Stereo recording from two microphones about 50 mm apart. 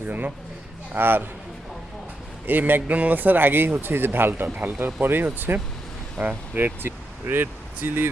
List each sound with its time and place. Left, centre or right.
0.0 s a man's voice: right
2.5 s speech: right
4.4 s speech: right
5.0 s speech: right
6.8 s speech: right